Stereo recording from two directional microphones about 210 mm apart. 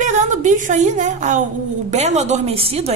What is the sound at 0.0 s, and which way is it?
A woman's voice, 35° right (ahead or behind).